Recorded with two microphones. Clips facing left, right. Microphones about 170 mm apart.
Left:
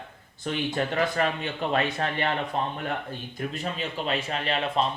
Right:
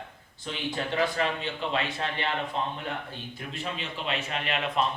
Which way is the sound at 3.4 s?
40° left (ahead or behind).